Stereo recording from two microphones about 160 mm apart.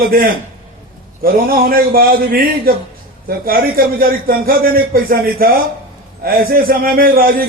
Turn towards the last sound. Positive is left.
turn(degrees=-65)  # may be behind; listen again after turning